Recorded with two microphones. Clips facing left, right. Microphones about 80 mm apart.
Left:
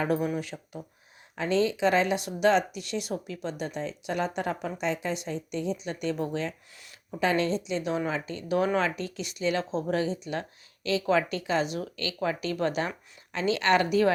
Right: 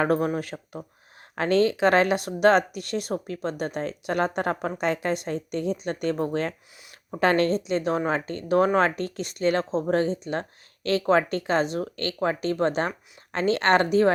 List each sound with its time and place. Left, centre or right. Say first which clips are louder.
0.0 s speech: right 4 dB; right